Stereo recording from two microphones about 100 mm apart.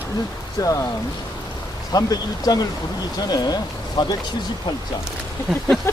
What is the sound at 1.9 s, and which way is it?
Speech, 40° left (ahead or behind).